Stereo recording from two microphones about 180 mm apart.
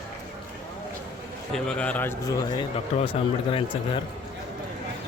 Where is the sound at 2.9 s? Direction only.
40° left (ahead or behind).